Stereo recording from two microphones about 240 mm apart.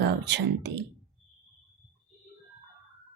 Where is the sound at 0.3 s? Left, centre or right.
Right.